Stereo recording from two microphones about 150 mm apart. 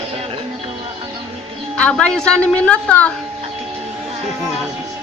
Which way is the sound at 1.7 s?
5° left (ahead or behind).